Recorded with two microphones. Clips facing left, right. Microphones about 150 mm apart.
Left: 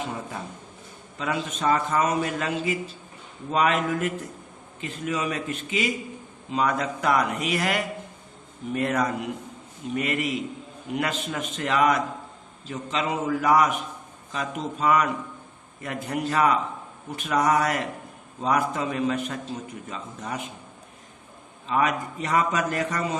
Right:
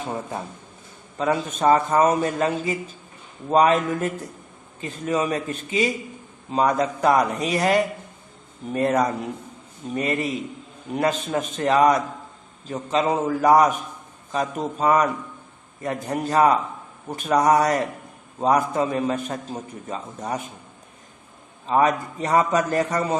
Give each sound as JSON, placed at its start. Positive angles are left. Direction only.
{"t": 1.2, "sound": "a man's voice", "side_deg": -40}
{"t": 21.7, "sound": "a man's voice", "side_deg": -35}